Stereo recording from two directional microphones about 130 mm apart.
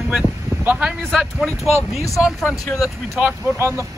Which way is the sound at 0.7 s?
10° right (ahead or behind).